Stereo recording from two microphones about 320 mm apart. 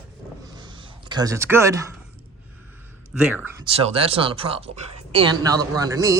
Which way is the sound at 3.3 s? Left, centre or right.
Centre.